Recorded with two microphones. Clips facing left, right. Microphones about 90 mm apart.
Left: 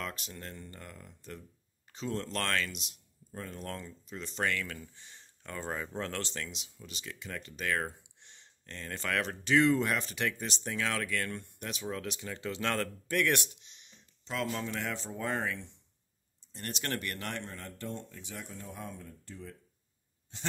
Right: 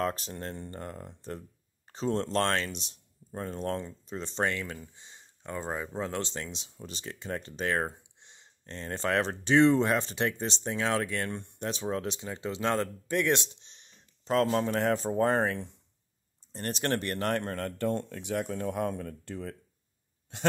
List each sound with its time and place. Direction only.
0.0 s speech: 35° right (ahead or behind)
17.6 s speech: 65° right (ahead or behind)